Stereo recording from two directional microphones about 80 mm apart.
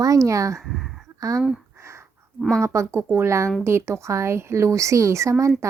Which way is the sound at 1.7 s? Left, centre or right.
Right.